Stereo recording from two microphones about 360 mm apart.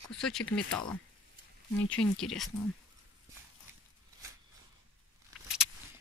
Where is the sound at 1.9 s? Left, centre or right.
Centre.